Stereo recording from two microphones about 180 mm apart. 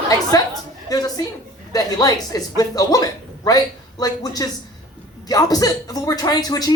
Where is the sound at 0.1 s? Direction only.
20° left (ahead or behind).